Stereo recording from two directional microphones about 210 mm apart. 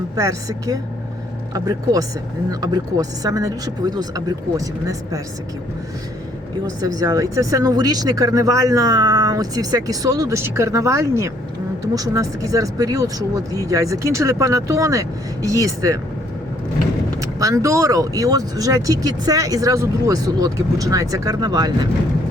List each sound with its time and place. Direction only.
0.2 s speech: 15° right (ahead or behind)
6.7 s speech: 15° right (ahead or behind)
17.2 s speech: 15° right (ahead or behind)